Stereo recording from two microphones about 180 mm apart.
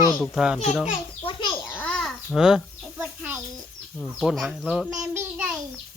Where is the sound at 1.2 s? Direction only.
25° left (ahead or behind).